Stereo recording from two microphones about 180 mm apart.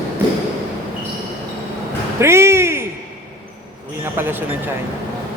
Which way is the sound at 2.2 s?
15° right (ahead or behind).